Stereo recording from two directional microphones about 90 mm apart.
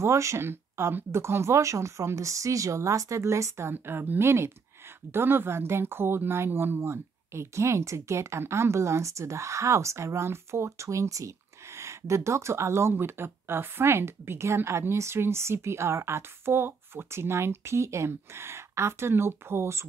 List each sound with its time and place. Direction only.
0.0 s speech: 30° right (ahead or behind)